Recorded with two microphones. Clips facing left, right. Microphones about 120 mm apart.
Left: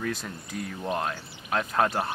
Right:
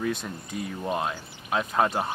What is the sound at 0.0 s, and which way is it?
Speech, centre (ahead or behind).